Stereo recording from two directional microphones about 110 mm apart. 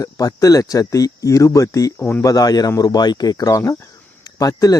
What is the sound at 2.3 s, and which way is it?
Speech, 35° left (ahead or behind).